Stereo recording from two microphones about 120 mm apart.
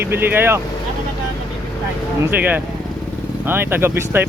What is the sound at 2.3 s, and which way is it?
Speech, 15° right (ahead or behind).